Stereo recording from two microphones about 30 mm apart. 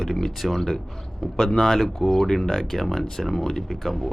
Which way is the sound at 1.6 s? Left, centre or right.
Centre.